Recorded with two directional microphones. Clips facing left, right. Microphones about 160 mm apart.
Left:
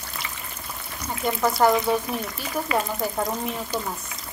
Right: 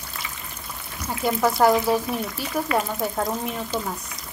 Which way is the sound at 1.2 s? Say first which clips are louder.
Right 1 dB; centre (ahead or behind).